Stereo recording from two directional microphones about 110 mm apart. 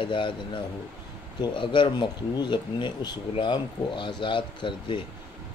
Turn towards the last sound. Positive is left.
turn(degrees=45)  # may be behind; listen again after turning